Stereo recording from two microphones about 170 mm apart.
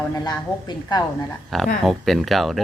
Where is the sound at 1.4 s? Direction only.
Centre (ahead or behind).